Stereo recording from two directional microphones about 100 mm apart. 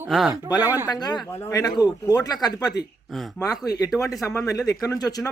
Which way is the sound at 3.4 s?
40° left (ahead or behind).